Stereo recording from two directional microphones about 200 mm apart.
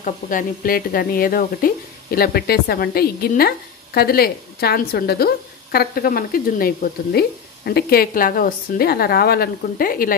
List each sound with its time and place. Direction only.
0.0 s speech: 40° left (ahead or behind)